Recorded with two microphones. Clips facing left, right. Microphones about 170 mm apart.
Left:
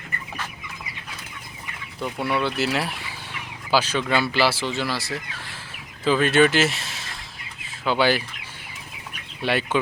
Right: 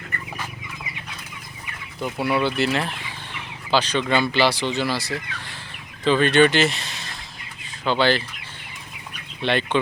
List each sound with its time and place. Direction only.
2.0 s speech: centre (ahead or behind)
7.6 s chicken: 5° left (ahead or behind)
9.4 s speech: 5° left (ahead or behind)